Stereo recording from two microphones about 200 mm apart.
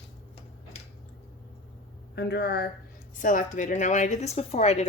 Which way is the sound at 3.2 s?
40° left (ahead or behind).